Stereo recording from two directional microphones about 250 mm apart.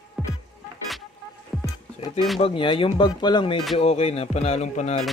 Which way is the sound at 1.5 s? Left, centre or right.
Centre.